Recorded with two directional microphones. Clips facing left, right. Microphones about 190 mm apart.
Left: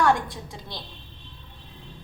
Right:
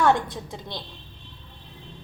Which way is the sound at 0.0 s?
20° right (ahead or behind).